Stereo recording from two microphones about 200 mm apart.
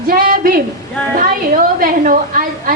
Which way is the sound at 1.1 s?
45° right (ahead or behind).